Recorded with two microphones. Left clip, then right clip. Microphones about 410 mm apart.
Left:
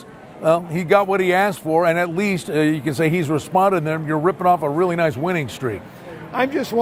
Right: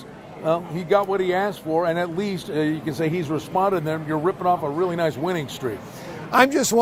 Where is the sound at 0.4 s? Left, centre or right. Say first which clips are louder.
Left 5 dB; left.